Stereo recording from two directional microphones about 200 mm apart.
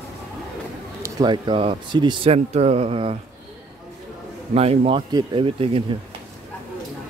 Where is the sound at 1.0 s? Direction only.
20° right (ahead or behind).